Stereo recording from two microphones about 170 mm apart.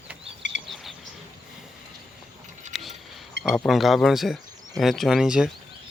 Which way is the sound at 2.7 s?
Centre (ahead or behind).